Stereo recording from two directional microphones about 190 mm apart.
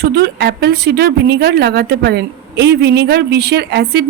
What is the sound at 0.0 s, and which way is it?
Speech, 60° right (ahead or behind).